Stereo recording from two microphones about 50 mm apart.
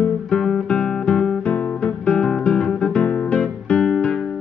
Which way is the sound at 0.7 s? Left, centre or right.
Centre.